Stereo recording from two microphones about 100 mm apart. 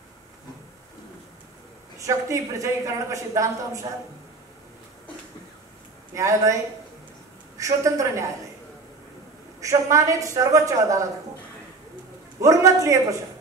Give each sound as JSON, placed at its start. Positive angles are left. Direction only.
{"t": 2.0, "sound": "a woman's voice", "side_deg": -30}
{"t": 6.1, "sound": "a woman's voice", "side_deg": -30}
{"t": 9.6, "sound": "a woman's voice", "side_deg": -30}
{"t": 12.4, "sound": "a woman's voice", "side_deg": -30}